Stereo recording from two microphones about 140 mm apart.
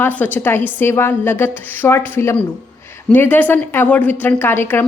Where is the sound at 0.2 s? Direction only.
15° left (ahead or behind).